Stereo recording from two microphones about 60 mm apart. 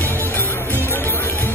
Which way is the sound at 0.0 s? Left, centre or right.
Left.